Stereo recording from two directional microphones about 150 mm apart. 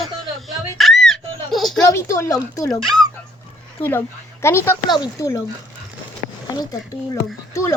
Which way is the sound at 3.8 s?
15° left (ahead or behind).